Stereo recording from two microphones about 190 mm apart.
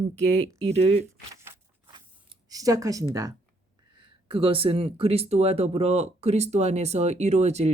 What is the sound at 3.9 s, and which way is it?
Speech, 25° right (ahead or behind).